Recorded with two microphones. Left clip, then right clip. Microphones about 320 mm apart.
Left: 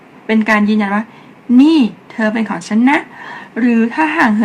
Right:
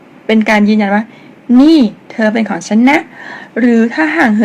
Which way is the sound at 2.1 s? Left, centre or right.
Centre.